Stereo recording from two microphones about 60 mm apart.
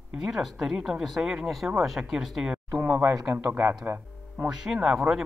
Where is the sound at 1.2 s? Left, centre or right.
Centre.